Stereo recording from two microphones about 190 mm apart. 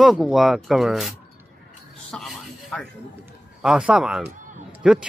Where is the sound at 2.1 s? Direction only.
5° left (ahead or behind).